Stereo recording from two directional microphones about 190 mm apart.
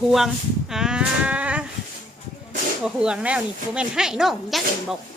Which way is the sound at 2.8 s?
5° right (ahead or behind).